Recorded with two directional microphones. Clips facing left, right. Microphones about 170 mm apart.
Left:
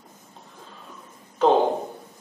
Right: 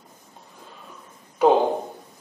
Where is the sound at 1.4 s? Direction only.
10° right (ahead or behind).